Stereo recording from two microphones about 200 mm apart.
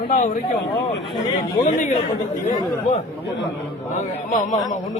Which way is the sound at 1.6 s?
35° left (ahead or behind).